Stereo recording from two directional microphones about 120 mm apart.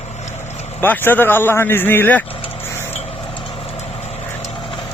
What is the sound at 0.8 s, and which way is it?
Speech, 15° left (ahead or behind).